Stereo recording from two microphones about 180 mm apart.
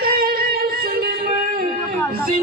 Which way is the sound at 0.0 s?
55° right (ahead or behind).